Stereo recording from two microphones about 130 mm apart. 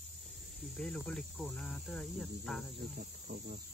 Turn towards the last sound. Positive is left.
turn(degrees=-70)  # may be behind; listen again after turning